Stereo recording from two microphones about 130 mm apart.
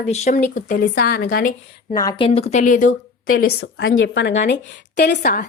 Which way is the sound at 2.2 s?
50° left (ahead or behind).